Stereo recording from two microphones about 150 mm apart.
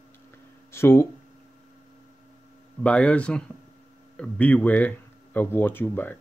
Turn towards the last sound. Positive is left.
turn(degrees=15)  # may be behind; listen again after turning